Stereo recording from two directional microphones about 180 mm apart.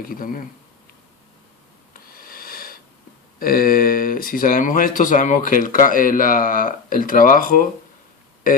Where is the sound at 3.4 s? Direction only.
55° left (ahead or behind).